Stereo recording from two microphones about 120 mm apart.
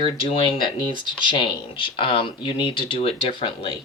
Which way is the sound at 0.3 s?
50° left (ahead or behind).